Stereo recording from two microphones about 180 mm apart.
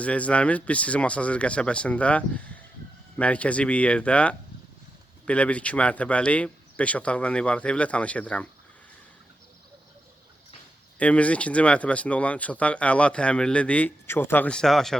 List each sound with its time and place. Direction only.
0.0 s speech: 5° left (ahead or behind)
11.0 s speech: 5° left (ahead or behind)